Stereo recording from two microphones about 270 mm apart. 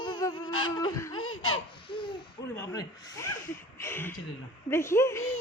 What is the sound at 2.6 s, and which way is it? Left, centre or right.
Speech, centre.